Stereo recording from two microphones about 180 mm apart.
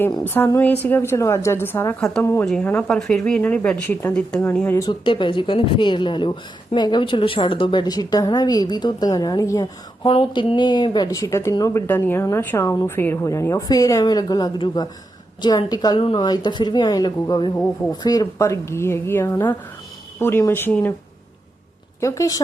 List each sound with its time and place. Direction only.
0.3 s a woman's voice: 10° left (ahead or behind)
4.9 s a woman's voice: 25° left (ahead or behind); by 20.9 s 10° left (ahead or behind)
22.0 s a woman's voice: 15° left (ahead or behind)